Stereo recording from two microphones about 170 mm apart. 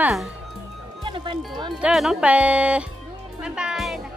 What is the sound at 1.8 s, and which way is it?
Speech, 5° right (ahead or behind).